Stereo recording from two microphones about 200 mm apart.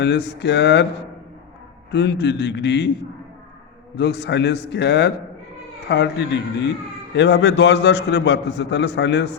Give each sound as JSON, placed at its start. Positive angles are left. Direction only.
{"t": 0.0, "sound": "a man's voice", "side_deg": 60}
{"t": 1.9, "sound": "a man's voice", "side_deg": 60}
{"t": 3.9, "sound": "a man's voice", "side_deg": 60}